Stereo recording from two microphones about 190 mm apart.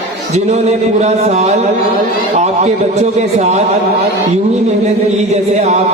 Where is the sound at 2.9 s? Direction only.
35° right (ahead or behind).